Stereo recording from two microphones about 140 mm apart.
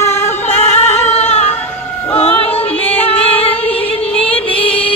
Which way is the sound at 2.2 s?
45° left (ahead or behind).